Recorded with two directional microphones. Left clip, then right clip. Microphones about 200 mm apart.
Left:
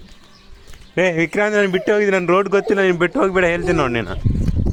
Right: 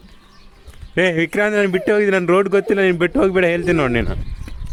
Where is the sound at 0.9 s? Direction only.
35° right (ahead or behind).